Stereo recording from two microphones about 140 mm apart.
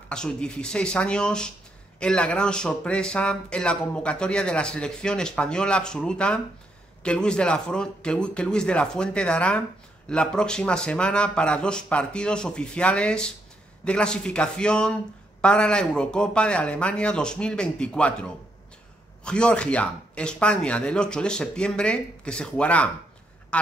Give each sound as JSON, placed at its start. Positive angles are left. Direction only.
{"t": 0.1, "sound": "speech", "side_deg": 5}